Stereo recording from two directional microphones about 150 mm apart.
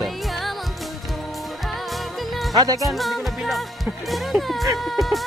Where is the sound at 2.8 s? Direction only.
Centre (ahead or behind).